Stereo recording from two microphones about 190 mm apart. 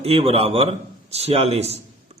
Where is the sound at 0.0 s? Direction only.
30° right (ahead or behind).